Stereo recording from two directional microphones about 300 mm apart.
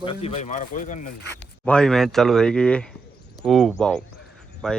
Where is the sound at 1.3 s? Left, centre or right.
Centre.